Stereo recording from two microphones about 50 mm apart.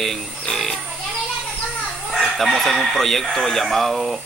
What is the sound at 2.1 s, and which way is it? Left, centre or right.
Speech, centre.